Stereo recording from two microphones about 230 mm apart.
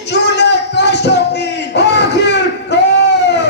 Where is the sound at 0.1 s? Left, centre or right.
Left.